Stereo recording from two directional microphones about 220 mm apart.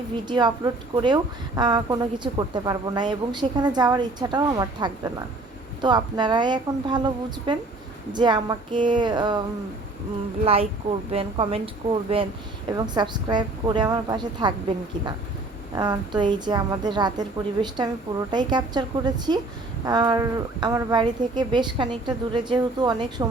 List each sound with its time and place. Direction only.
0.3 s a woman's voice: 20° right (ahead or behind)
10.4 s a woman's voice: 25° right (ahead or behind)
15.7 s a woman's voice: 20° right (ahead or behind)